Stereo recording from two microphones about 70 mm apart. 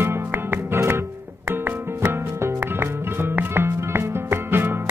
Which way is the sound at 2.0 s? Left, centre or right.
Right.